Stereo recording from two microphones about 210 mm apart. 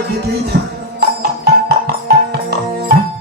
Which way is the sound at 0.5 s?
50° right (ahead or behind).